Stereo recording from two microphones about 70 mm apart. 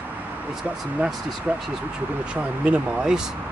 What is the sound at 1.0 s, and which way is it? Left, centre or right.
Speech, right.